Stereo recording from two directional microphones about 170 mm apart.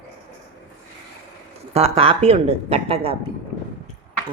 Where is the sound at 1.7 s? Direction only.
35° right (ahead or behind).